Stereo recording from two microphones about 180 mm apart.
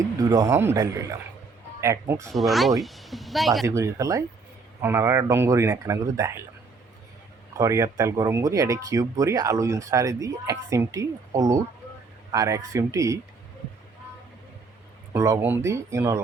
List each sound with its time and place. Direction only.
0.2 s speech: 20° right (ahead or behind)
2.3 s speech: centre (ahead or behind)
3.7 s speech: 15° right (ahead or behind)
7.5 s speech: 20° right (ahead or behind)
15.1 s speech: 15° right (ahead or behind)